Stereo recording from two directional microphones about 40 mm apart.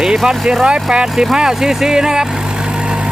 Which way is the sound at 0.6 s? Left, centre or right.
Right.